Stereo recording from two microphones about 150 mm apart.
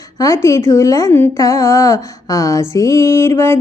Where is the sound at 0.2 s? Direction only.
20° left (ahead or behind).